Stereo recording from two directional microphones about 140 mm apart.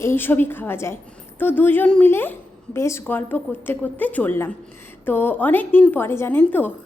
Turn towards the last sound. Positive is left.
turn(degrees=10)  # may be behind; listen again after turning